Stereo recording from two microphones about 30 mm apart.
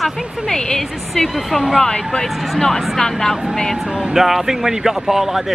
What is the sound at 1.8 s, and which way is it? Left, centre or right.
Speech, left.